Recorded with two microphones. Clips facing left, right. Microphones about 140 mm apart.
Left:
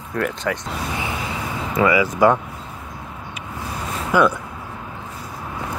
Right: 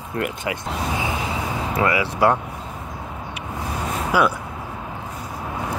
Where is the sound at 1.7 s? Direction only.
5° right (ahead or behind).